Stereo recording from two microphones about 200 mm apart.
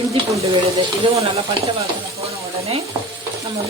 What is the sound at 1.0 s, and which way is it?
Speech, 30° right (ahead or behind).